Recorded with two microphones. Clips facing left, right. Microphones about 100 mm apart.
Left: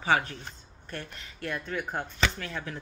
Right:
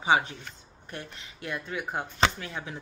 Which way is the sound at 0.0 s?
20° right (ahead or behind).